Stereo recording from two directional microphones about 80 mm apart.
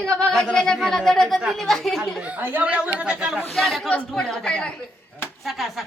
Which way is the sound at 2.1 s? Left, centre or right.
Centre.